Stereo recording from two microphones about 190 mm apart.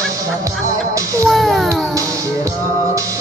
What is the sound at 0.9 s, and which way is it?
Music, 15° right (ahead or behind).